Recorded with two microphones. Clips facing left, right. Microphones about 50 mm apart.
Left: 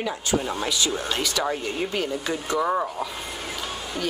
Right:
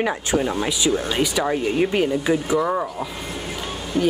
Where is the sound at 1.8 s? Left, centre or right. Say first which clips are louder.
Right 10 dB; right.